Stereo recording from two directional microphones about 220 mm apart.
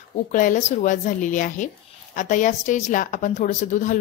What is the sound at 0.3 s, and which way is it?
A woman's voice, 35° left (ahead or behind).